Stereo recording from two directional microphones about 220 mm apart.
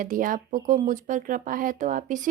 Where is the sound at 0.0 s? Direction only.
40° right (ahead or behind).